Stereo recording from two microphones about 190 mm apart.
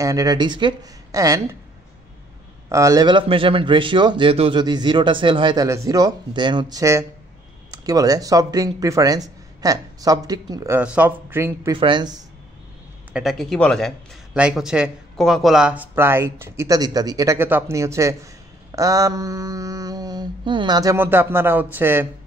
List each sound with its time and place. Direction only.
0.0 s speech: 20° right (ahead or behind)
2.7 s a man's voice: 15° right (ahead or behind)
10.8 s speech: 5° right (ahead or behind)
11.7 s a man's voice: 25° right (ahead or behind)
13.1 s a man's voice: centre (ahead or behind)